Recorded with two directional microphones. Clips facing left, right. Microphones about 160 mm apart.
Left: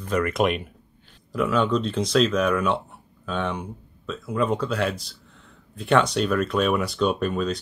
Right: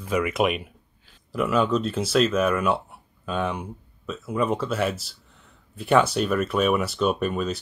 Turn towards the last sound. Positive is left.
turn(degrees=-5)  # may be behind; listen again after turning